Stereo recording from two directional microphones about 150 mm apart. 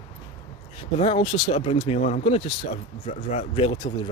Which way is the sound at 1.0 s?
40° left (ahead or behind).